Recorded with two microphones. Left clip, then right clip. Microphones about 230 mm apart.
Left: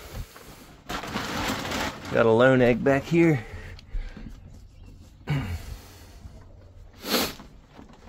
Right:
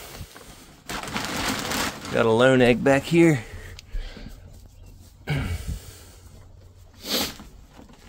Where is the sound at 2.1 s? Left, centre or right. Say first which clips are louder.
Right 1 dB; centre.